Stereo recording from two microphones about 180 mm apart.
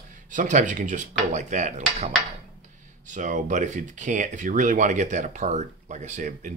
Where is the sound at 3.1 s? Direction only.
45° right (ahead or behind).